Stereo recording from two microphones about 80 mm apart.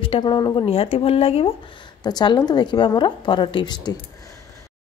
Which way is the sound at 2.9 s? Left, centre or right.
Left.